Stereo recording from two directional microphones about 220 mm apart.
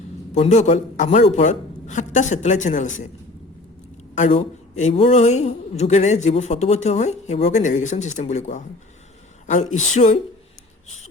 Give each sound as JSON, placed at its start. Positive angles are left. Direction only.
{"t": 0.3, "sound": "a woman's voice", "side_deg": 30}
{"t": 4.1, "sound": "a woman's voice", "side_deg": 30}
{"t": 9.7, "sound": "a woman's voice", "side_deg": 30}